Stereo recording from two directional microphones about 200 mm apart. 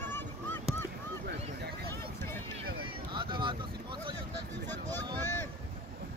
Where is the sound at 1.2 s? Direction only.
55° right (ahead or behind).